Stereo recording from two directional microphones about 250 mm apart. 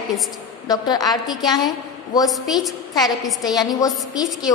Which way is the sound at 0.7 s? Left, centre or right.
Centre.